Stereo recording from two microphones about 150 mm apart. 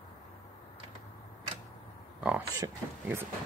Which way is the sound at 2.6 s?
15° right (ahead or behind).